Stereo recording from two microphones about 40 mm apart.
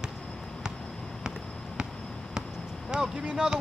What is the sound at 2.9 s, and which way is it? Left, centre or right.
Speech, centre.